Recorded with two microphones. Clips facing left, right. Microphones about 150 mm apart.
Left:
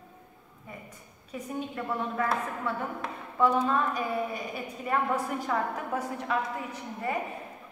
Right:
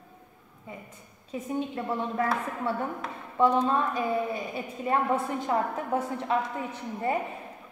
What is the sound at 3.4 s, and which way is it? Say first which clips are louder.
A woman's voice: right 2 dB; 25° right (ahead or behind).